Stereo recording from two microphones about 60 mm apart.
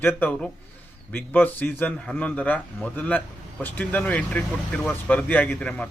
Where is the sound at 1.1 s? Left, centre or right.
Left.